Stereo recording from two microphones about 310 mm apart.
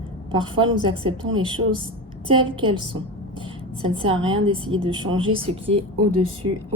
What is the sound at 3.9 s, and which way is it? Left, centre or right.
Speech, centre.